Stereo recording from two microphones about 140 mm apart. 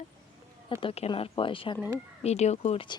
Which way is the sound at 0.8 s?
40° left (ahead or behind).